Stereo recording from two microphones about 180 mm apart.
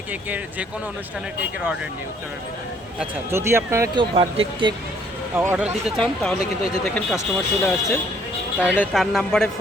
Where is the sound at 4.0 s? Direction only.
30° right (ahead or behind).